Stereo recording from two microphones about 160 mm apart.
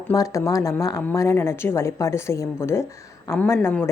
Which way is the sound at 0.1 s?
20° left (ahead or behind).